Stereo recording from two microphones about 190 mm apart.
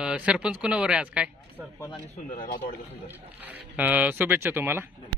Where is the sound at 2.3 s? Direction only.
50° left (ahead or behind).